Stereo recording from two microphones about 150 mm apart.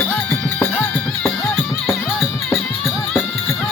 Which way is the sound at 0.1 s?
10° left (ahead or behind).